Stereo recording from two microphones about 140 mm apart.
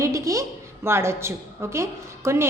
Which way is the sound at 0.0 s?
20° right (ahead or behind).